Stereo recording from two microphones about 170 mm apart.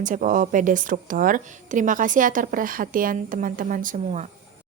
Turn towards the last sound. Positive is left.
turn(degrees=-45)  # may be behind; listen again after turning